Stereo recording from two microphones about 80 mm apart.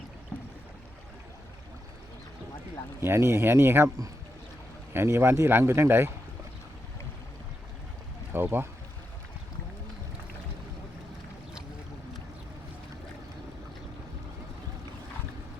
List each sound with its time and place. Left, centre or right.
3.0 s speech: right
4.9 s speech: right
8.3 s speech: right